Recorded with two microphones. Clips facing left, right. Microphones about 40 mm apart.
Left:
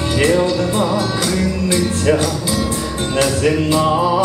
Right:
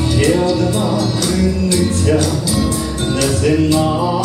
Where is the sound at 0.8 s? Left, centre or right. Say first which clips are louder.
Even; left.